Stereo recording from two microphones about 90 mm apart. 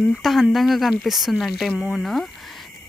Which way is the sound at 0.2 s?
Centre (ahead or behind).